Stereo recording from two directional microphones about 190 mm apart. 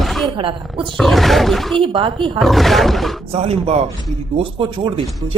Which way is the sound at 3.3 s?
30° right (ahead or behind).